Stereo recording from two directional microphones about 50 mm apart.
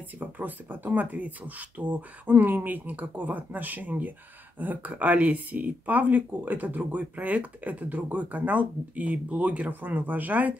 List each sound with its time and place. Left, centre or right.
0.2 s speech: right